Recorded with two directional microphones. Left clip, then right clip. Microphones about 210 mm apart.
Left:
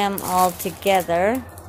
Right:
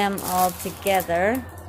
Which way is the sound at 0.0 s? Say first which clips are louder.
Left 3 dB; 10° left (ahead or behind).